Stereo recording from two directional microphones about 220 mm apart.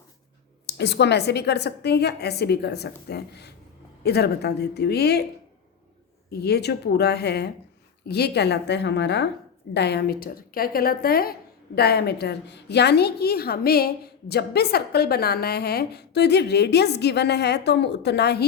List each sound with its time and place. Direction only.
0.7 s a woman's voice: 50° left (ahead or behind)
6.4 s a woman's voice: 50° left (ahead or behind)